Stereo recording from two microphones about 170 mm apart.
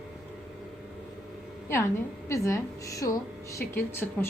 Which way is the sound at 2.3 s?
15° left (ahead or behind).